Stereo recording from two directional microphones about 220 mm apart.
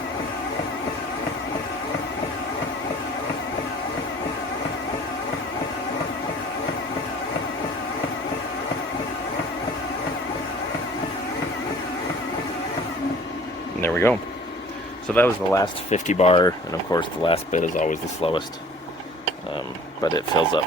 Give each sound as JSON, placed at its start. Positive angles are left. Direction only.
{"t": 13.8, "sound": "vehicle", "side_deg": 10}
{"t": 15.1, "sound": "speech", "side_deg": 10}
{"t": 15.9, "sound": "speech", "side_deg": 30}
{"t": 20.1, "sound": "speech", "side_deg": 20}